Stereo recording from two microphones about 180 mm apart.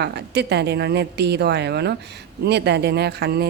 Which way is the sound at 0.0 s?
70° right (ahead or behind).